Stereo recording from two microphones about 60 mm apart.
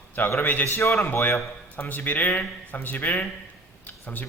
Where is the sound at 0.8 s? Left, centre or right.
Left.